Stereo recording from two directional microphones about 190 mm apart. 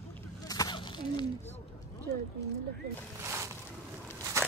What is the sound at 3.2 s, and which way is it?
Boat, 15° right (ahead or behind).